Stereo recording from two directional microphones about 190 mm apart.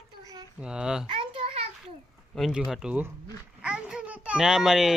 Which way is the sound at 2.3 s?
Centre (ahead or behind).